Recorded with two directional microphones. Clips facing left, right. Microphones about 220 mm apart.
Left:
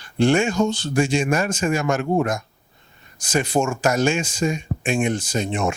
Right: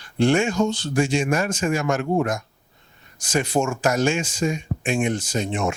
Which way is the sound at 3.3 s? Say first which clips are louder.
Left 1 dB; 15° left (ahead or behind).